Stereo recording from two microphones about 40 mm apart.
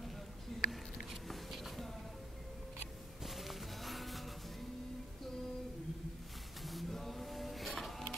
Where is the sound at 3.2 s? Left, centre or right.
Centre.